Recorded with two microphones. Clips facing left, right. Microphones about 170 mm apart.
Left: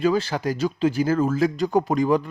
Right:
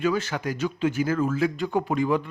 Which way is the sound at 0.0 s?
35° left (ahead or behind).